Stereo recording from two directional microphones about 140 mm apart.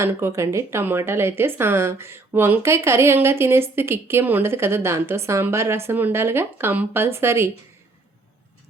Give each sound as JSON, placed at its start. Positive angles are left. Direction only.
{"t": 0.0, "sound": "a woman's voice", "side_deg": -20}